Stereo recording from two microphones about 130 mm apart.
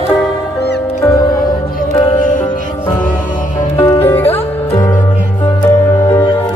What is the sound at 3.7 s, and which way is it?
Music, 45° left (ahead or behind).